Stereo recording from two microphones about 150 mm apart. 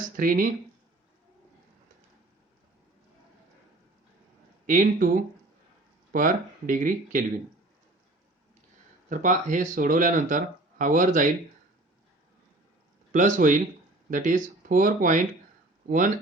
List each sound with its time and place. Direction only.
0.2 s speech: 70° right (ahead or behind)
4.6 s speech: 60° right (ahead or behind)
6.1 s speech: 65° right (ahead or behind)
9.0 s speech: 60° right (ahead or behind)
13.1 s speech: 55° right (ahead or behind)